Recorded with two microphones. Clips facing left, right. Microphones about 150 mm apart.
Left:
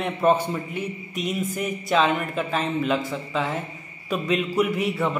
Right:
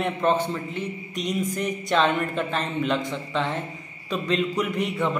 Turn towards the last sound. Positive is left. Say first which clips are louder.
# left 1 dB
turn(degrees=5)  # may be behind; listen again after turning